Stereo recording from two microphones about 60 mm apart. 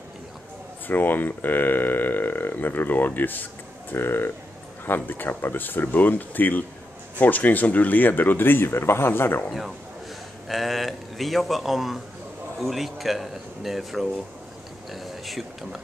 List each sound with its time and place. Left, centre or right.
0.8 s speech: left
10.5 s speech: centre